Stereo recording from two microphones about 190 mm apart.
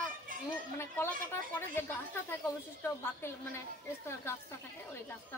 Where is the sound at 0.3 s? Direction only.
45° right (ahead or behind).